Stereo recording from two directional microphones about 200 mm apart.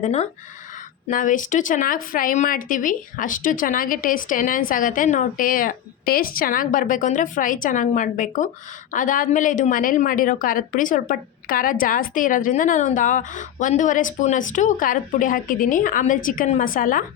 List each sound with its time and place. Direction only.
0.0 s a woman's voice: 35° left (ahead or behind)